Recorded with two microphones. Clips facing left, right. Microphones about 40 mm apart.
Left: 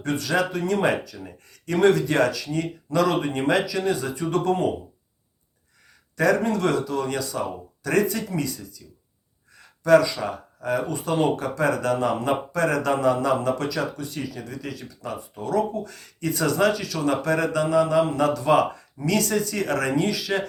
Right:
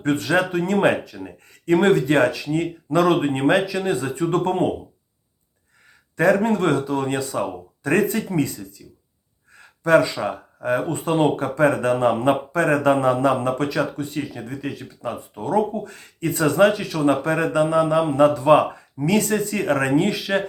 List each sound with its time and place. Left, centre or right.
0.0 s speech: right
6.1 s speech: right